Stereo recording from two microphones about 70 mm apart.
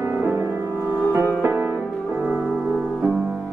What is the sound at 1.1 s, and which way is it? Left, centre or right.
Music, right.